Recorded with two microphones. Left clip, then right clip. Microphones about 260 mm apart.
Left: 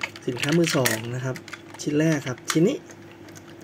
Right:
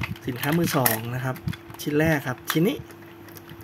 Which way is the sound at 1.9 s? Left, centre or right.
Right.